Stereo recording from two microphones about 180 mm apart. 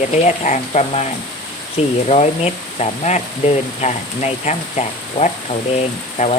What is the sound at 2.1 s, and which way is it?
Speech, 35° left (ahead or behind).